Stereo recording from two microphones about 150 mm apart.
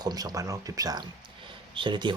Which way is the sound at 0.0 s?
25° right (ahead or behind).